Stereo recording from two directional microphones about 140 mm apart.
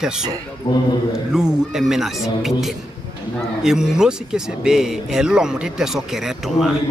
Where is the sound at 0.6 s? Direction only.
40° left (ahead or behind).